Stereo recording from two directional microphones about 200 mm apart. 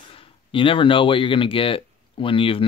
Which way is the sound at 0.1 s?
25° left (ahead or behind).